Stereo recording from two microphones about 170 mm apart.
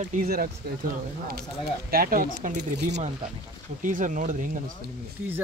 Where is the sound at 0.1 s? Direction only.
60° right (ahead or behind).